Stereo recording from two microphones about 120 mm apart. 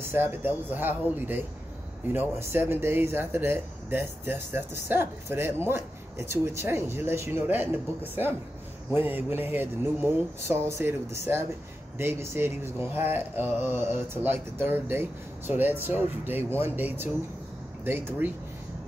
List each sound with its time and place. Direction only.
0.0 s speech: 20° right (ahead or behind)